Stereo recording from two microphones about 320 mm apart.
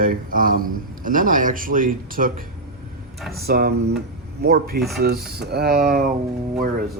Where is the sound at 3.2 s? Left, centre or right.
Centre.